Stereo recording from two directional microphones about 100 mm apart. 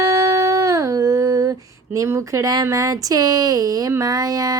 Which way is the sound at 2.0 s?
30° right (ahead or behind).